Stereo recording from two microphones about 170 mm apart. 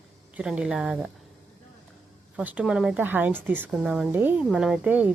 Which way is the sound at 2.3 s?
10° right (ahead or behind).